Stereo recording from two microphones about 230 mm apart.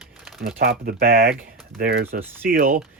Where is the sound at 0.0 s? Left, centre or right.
Centre.